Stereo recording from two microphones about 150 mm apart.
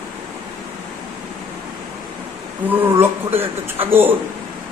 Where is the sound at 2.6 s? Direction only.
15° right (ahead or behind).